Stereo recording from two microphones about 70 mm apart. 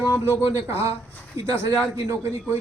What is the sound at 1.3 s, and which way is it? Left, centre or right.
Speech, right.